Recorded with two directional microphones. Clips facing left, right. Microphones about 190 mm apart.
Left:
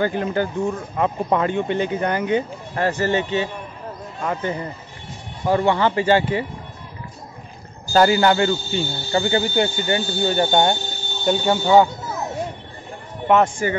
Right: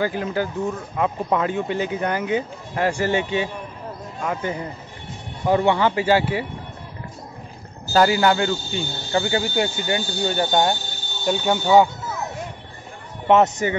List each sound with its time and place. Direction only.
0.0 s speech: 5° right (ahead or behind)
7.9 s speech: 5° right (ahead or behind)
13.3 s speech: 20° right (ahead or behind)